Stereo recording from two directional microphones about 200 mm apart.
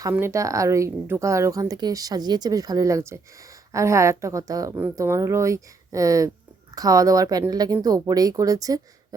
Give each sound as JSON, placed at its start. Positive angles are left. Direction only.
{"t": 0.0, "sound": "speech", "side_deg": -15}